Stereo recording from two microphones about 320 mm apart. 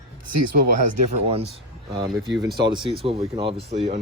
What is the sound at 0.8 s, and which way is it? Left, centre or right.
Speech, right.